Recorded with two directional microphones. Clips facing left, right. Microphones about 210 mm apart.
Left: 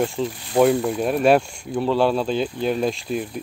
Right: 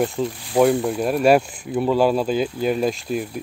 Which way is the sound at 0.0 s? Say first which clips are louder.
Right 1 dB; centre (ahead or behind).